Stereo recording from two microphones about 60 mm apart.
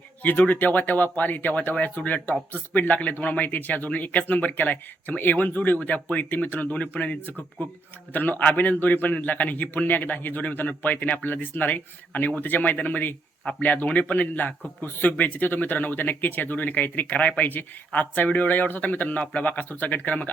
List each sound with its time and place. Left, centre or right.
0.2 s speech: left